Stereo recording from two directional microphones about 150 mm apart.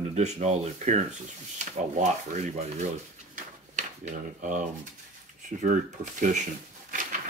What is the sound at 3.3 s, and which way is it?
Drawer open or close, 55° right (ahead or behind).